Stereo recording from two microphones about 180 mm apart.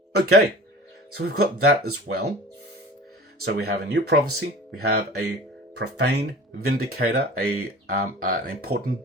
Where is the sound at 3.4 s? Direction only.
70° right (ahead or behind).